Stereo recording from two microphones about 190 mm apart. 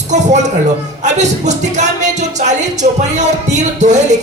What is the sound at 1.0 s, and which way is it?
A man's voice, 40° right (ahead or behind).